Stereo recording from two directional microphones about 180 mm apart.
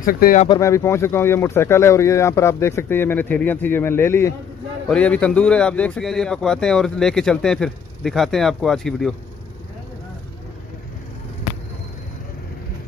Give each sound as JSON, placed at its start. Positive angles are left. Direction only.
{"t": 0.0, "sound": "speech", "side_deg": 50}
{"t": 0.5, "sound": "speech", "side_deg": 15}